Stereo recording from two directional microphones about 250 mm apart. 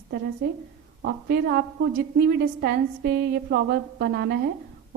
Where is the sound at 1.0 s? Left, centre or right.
Right.